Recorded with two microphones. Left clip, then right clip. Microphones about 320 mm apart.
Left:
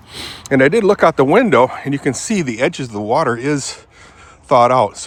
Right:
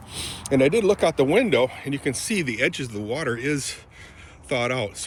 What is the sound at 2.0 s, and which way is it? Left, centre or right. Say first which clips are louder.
Speech: left 5 dB; centre.